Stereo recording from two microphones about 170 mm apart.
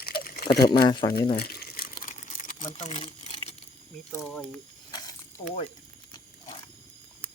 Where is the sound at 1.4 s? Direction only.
70° left (ahead or behind); by 3.3 s 35° left (ahead or behind).